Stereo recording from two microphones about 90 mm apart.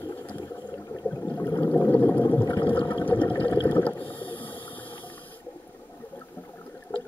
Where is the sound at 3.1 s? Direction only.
55° left (ahead or behind).